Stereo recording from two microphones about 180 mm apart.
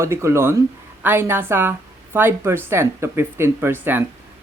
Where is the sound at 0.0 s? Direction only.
15° right (ahead or behind).